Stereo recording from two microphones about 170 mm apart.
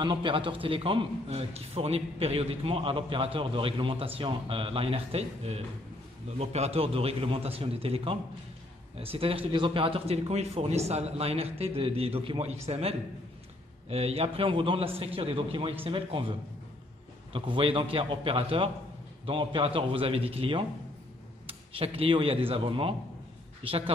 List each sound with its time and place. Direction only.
0.0 s a man's voice: 30° right (ahead or behind)